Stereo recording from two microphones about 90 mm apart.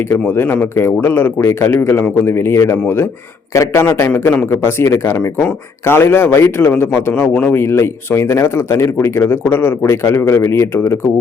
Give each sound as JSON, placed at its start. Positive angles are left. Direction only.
{"t": 0.1, "sound": "speech", "side_deg": 20}
{"t": 2.7, "sound": "speech", "side_deg": 20}
{"t": 3.5, "sound": "a man's voice", "side_deg": 35}
{"t": 7.1, "sound": "speech", "side_deg": 15}